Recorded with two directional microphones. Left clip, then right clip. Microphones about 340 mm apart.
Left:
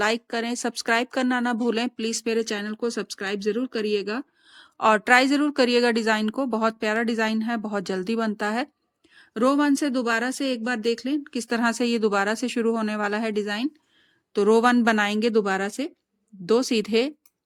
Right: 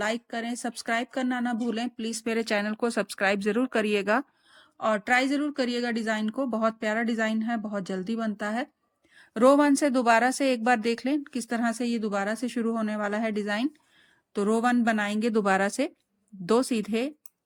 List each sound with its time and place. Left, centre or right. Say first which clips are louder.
0.0 s speech: left 6 dB; centre
3.8 s speech: left 2 dB; right
4.1 s speech: right 6 dB; centre